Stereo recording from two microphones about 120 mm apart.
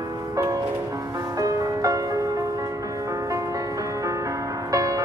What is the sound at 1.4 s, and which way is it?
Music, 30° right (ahead or behind).